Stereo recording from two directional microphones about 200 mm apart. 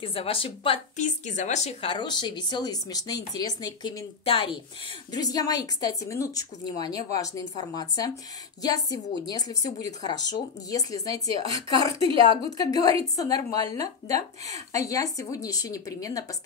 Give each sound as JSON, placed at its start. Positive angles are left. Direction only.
{"t": 0.0, "sound": "a woman's voice", "side_deg": 25}